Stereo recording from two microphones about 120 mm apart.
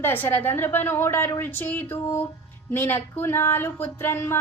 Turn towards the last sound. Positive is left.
turn(degrees=20)  # may be behind; listen again after turning